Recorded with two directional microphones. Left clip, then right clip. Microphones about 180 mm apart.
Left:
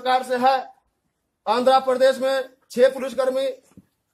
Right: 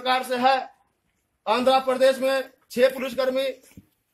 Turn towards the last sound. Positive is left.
turn(degrees=10)  # may be behind; listen again after turning